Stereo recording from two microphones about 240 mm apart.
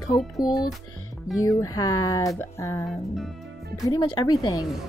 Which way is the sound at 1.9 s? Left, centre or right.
Left.